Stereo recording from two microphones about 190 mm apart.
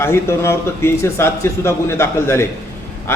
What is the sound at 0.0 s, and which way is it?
A man's voice, 15° left (ahead or behind).